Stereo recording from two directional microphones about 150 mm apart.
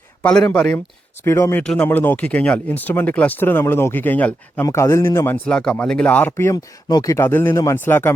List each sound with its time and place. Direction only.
0.2 s speech: 5° left (ahead or behind)
1.2 s speech: 15° left (ahead or behind)
1.6 s a man's voice: 5° left (ahead or behind)